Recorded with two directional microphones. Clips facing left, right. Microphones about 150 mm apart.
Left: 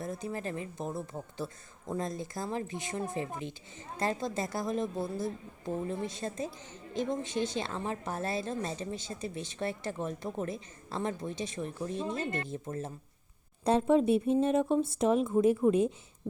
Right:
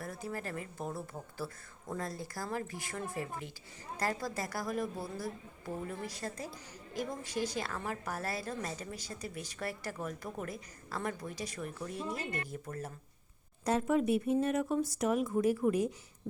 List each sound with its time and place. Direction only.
0.0 s a woman's voice: 20° left (ahead or behind)